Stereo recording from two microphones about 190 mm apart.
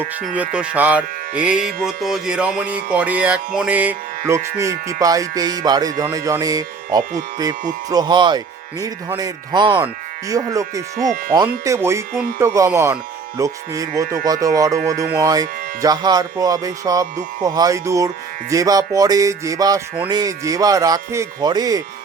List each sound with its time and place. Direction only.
0.3 s speech: 5° right (ahead or behind)
1.4 s music: 5° right (ahead or behind)
4.3 s speech: 15° right (ahead or behind)
4.6 s music: 15° right (ahead or behind)
9.8 s speech: 20° right (ahead or behind)
11.0 s speech: 45° right (ahead or behind)
11.4 s speech: 15° right (ahead or behind)
15.2 s music: 20° right (ahead or behind)
18.5 s speech: 20° right (ahead or behind)
20.1 s music: 20° right (ahead or behind)